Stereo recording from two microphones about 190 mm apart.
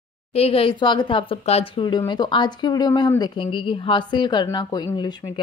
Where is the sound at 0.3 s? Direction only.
30° left (ahead or behind).